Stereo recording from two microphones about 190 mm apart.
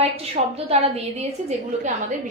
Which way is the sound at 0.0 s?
30° right (ahead or behind).